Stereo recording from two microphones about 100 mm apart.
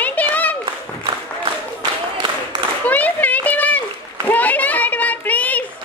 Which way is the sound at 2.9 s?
15° left (ahead or behind).